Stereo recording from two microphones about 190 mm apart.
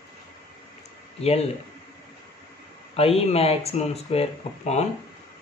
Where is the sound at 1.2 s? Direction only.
35° left (ahead or behind).